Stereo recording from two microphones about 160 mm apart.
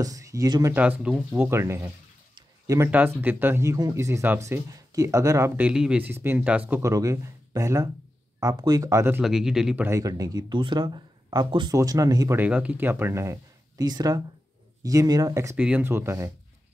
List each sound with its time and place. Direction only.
0.0 s speech: 20° right (ahead or behind)
0.7 s speech: 10° right (ahead or behind)
2.3 s a sound: 20° right (ahead or behind)
2.9 s speech: 10° right (ahead or behind)
5.6 s speech: 5° right (ahead or behind)
9.2 s speech: 5° right (ahead or behind)
9.8 s speech: 20° right (ahead or behind)
12.4 s speech: 10° right (ahead or behind)
15.5 s speech: 10° right (ahead or behind)